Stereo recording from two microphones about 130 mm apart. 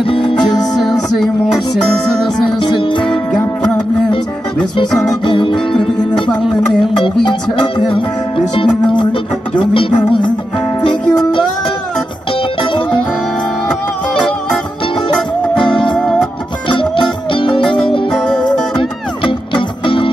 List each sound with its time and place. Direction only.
0.0 s music: 40° left (ahead or behind)
0.8 s music: centre (ahead or behind)
2.2 s music: 40° left (ahead or behind)
4.7 s music: 40° left (ahead or behind)
7.2 s music: 40° left (ahead or behind)
15.6 s music: 40° left (ahead or behind)
18.1 s music: 5° left (ahead or behind)
18.8 s music: 40° left (ahead or behind)